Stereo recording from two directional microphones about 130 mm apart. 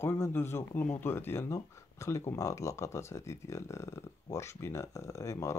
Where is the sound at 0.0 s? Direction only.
20° left (ahead or behind).